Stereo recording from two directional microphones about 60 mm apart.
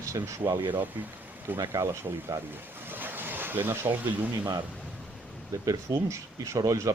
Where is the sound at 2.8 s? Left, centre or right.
Right.